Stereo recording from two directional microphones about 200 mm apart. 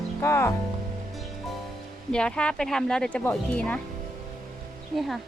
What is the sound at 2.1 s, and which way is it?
Speech, 5° left (ahead or behind).